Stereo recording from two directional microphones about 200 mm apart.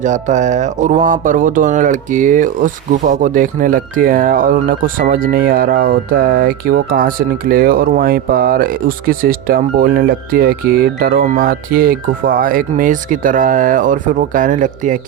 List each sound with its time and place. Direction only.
0.0 s speech: 35° right (ahead or behind)